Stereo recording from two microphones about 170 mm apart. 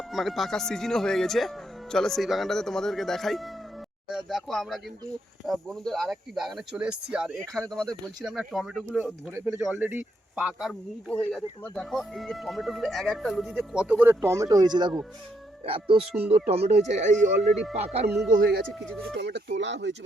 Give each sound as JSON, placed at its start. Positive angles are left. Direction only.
{"t": 0.1, "sound": "speech", "side_deg": 0}
{"t": 10.7, "sound": "speech", "side_deg": 5}
{"t": 18.7, "sound": "speech", "side_deg": 0}
{"t": 19.1, "sound": "speech", "side_deg": -90}